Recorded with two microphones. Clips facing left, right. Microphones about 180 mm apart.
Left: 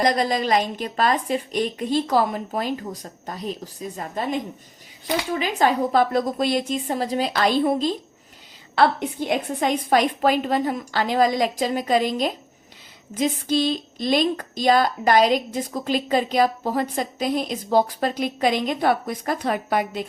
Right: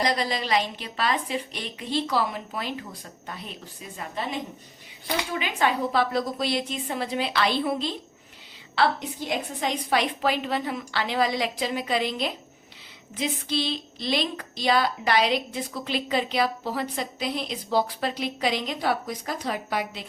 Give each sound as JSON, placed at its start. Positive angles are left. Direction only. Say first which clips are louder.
{"t": 0.0, "sound": "a woman's voice", "louder": "left 5 dB", "side_deg": 45}
{"t": 5.4, "sound": "a woman's voice", "louder": "left 5 dB", "side_deg": 40}